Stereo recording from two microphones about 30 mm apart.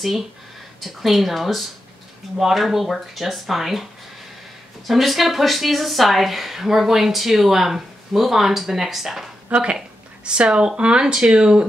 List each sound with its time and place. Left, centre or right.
0.7 s speech: centre
4.8 s speech: centre
9.5 s speech: right